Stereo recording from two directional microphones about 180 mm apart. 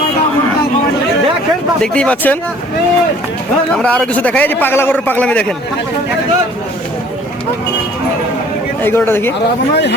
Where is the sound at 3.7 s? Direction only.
5° left (ahead or behind).